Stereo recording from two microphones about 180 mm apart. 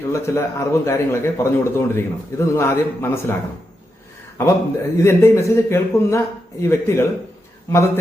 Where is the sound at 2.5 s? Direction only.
15° left (ahead or behind).